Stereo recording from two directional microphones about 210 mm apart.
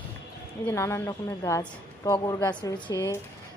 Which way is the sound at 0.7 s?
10° left (ahead or behind).